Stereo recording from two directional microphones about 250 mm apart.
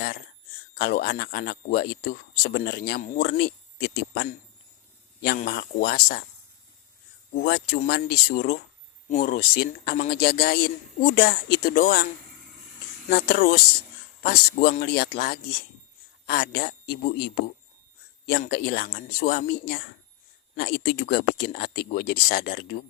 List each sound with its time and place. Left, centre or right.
0.7 s speech: left
7.3 s speech: left
13.1 s speech: left